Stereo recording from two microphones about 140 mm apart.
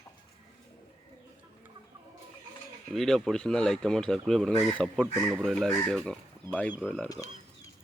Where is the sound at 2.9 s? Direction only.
Centre (ahead or behind).